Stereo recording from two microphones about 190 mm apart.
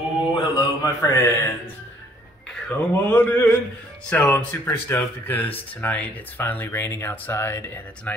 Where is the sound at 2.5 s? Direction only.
10° left (ahead or behind).